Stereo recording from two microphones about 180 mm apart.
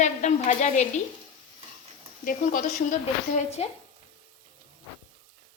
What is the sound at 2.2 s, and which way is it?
A woman's voice, 45° left (ahead or behind).